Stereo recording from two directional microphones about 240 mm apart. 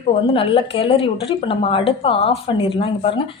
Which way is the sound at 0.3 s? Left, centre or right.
Left.